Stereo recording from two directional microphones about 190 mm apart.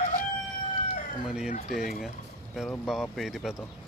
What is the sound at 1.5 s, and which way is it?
Speech, 35° left (ahead or behind).